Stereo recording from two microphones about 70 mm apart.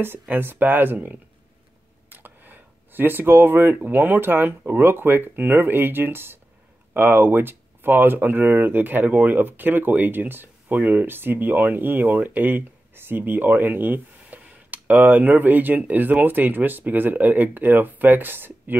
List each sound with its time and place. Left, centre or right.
0.0 s speech: right